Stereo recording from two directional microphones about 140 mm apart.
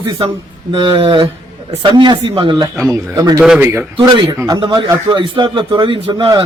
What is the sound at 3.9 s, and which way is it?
A man's voice, 35° right (ahead or behind).